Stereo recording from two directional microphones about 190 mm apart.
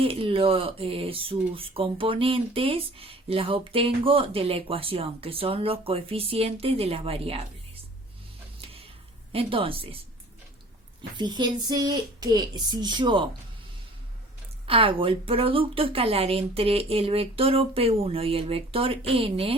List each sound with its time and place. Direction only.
0.0 s speech: 30° right (ahead or behind)
8.6 s a sound: 30° right (ahead or behind)
9.3 s speech: 30° right (ahead or behind)
11.2 s speech: 25° right (ahead or behind)
14.7 s speech: 30° right (ahead or behind)